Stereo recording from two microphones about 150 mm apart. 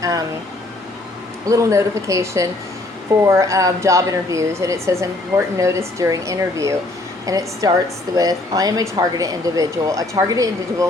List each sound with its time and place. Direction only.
1.5 s a woman's voice: 20° right (ahead or behind)